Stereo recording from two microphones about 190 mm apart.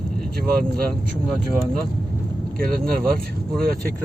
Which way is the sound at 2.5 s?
50° right (ahead or behind).